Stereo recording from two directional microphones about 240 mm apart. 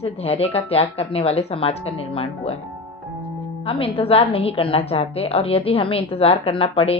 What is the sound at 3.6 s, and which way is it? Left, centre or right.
A woman's voice, left.